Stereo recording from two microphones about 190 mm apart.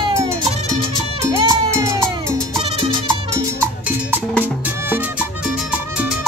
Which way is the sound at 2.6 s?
30° right (ahead or behind).